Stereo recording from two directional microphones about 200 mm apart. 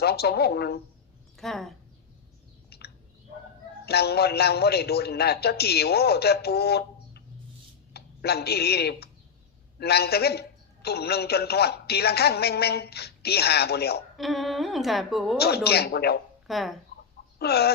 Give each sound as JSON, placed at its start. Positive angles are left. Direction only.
{"t": 0.0, "sound": "a man's voice", "side_deg": 55}
{"t": 1.4, "sound": "a woman's voice", "side_deg": 0}
{"t": 2.6, "sound": "bird", "side_deg": 55}
{"t": 3.8, "sound": "a man's voice", "side_deg": 55}
{"t": 14.2, "sound": "a woman's voice", "side_deg": 0}
{"t": 15.4, "sound": "a man's voice", "side_deg": 55}
{"t": 16.5, "sound": "speech", "side_deg": 0}
{"t": 17.4, "sound": "a man's voice", "side_deg": 50}